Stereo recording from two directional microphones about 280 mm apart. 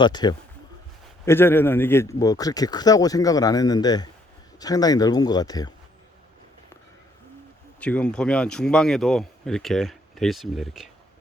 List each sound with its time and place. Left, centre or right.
0.0 s speech: centre
7.8 s speech: centre